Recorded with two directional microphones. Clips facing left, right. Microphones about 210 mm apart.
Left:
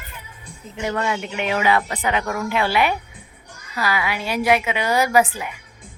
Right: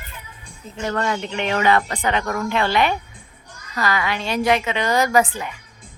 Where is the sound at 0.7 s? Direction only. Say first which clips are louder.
Even; 10° left (ahead or behind).